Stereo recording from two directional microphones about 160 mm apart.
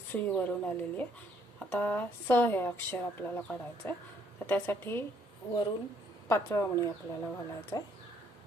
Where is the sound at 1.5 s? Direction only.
10° left (ahead or behind).